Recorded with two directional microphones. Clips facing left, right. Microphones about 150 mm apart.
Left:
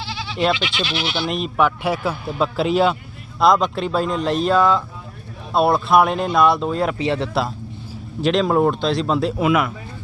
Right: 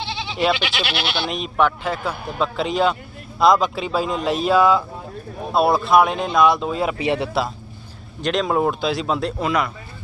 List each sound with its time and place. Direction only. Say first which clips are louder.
0.0 s goat: right 1 dB; 20° right (ahead or behind)
0.5 s speech: even; 60° right (ahead or behind)
1.3 s speech: left 1 dB; 5° left (ahead or behind)
8.2 s speech: left 3 dB; centre (ahead or behind)